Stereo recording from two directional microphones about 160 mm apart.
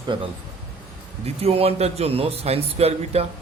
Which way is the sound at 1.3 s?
40° right (ahead or behind).